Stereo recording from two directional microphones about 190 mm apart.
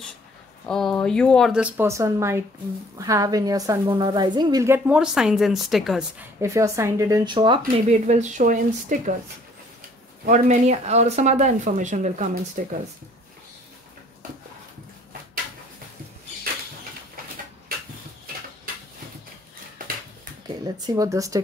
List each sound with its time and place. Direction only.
0.7 s a woman's voice: centre (ahead or behind)
6.4 s a woman's voice: 15° right (ahead or behind)
7.6 s speech: 40° right (ahead or behind)
10.2 s speech: 40° right (ahead or behind)
20.4 s speech: 20° right (ahead or behind)